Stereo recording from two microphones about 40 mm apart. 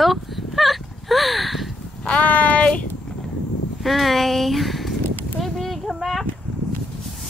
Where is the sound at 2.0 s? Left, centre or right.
Left.